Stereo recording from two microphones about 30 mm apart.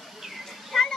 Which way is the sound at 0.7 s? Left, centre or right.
Centre.